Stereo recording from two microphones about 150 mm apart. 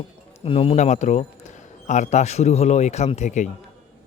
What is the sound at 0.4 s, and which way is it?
A man's voice, 40° left (ahead or behind).